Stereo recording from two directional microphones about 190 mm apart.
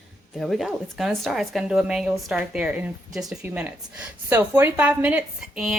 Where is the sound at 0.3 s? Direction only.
Centre (ahead or behind).